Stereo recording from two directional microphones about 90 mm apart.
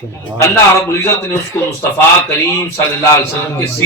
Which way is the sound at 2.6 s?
35° left (ahead or behind).